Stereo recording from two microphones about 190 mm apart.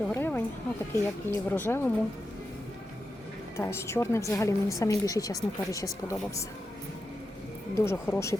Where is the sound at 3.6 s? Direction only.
15° left (ahead or behind).